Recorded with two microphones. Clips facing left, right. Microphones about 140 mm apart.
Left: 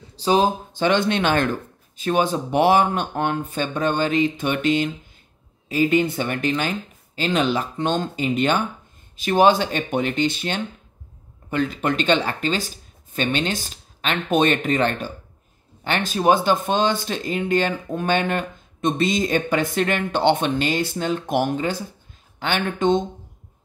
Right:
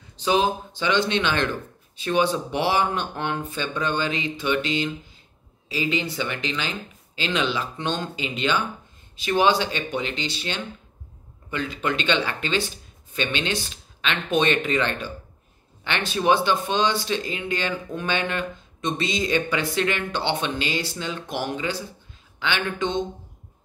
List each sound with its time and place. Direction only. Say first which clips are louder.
0.1 s speech: left 3 dB; 35° left (ahead or behind)